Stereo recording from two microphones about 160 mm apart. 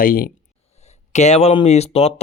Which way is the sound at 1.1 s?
45° left (ahead or behind).